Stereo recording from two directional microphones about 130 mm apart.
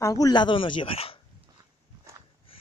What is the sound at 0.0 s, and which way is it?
Speech, 30° left (ahead or behind).